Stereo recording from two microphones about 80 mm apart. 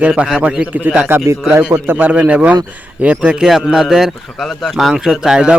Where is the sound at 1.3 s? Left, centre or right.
Right.